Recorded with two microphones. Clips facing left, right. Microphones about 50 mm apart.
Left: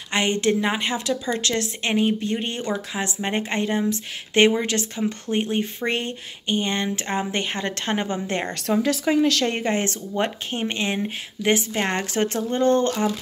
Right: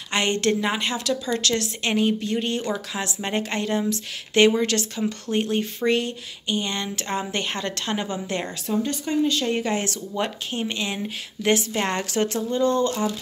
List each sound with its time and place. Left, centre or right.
0.1 s speech: centre; by 8.5 s left
8.8 s speech: left
9.5 s speech: left
11.0 s speech: centre; by 13.1 s left